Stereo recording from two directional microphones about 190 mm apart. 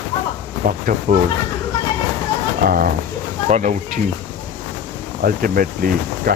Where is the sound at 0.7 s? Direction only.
45° right (ahead or behind).